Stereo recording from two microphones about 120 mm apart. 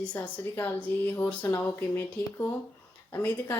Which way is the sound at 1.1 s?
20° left (ahead or behind).